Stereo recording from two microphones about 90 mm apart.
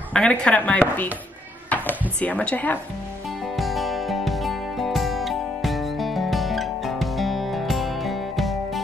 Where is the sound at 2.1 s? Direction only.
15° left (ahead or behind).